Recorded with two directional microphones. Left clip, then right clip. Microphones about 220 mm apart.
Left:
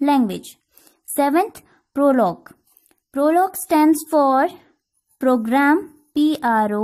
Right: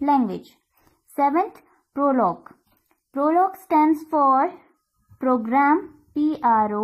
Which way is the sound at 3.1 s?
50° left (ahead or behind).